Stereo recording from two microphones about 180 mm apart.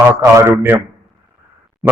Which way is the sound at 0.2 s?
15° right (ahead or behind).